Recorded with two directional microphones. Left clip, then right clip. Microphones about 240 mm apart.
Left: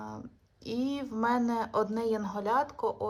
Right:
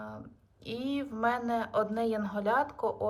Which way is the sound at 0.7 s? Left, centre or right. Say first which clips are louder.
Left 1 dB; centre.